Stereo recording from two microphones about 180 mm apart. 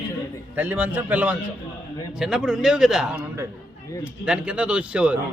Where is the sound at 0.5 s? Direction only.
10° right (ahead or behind).